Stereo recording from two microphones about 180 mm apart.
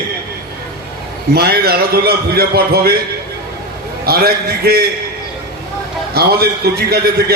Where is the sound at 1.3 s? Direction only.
60° right (ahead or behind).